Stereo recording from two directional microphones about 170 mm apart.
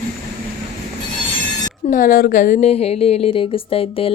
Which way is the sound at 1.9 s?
55° left (ahead or behind).